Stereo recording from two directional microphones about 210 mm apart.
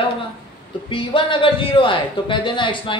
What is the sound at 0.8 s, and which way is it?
A man's voice, 25° left (ahead or behind).